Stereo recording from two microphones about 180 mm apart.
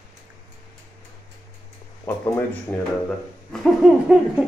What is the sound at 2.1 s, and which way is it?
Speech, 10° left (ahead or behind).